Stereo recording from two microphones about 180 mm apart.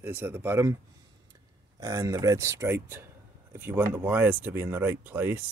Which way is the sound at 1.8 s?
15° right (ahead or behind).